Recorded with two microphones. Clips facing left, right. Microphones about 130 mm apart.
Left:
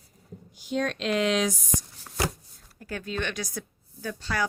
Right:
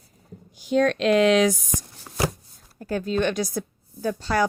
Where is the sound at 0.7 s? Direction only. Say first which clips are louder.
Right 8 dB; 85° right.